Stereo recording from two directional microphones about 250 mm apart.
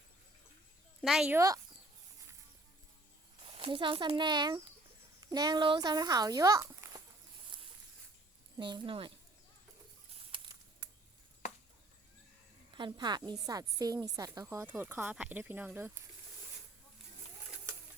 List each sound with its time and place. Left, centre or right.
1.0 s speech: centre
3.4 s speech: right
8.5 s a woman's voice: centre
10.3 s a sound: centre
12.7 s a woman's voice: centre